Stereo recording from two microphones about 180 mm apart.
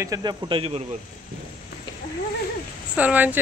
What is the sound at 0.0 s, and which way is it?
Speech, 20° right (ahead or behind).